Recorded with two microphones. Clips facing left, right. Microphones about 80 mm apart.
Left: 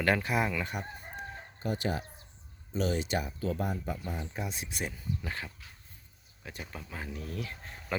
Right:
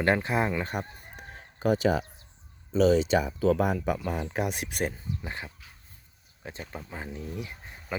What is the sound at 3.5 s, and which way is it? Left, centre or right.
Speech, right.